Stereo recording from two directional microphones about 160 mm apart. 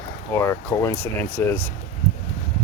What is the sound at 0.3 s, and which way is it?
Speech, 15° left (ahead or behind).